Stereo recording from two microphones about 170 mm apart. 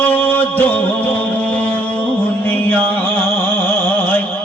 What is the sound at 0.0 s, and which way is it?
Music, 10° left (ahead or behind).